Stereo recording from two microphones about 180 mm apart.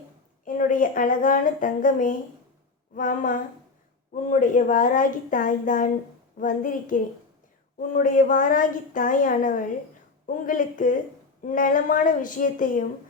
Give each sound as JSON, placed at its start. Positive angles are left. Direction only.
{"t": 0.4, "sound": "speech", "side_deg": 45}